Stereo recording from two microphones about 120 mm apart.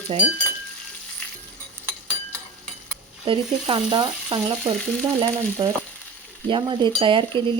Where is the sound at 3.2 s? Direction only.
45° right (ahead or behind).